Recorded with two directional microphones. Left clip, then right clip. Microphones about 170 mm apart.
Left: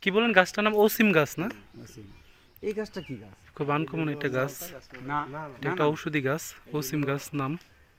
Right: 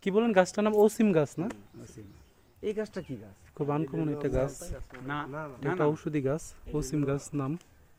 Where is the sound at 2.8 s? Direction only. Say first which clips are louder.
Even; 25° left (ahead or behind).